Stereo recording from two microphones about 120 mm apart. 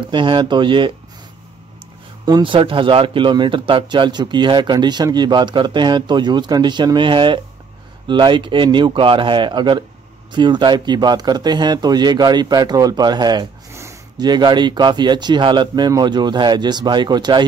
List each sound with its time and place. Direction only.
0.1 s speech: 40° right (ahead or behind)
2.2 s speech: 40° right (ahead or behind)
13.7 s a sound: 25° right (ahead or behind)
14.2 s speech: 35° right (ahead or behind)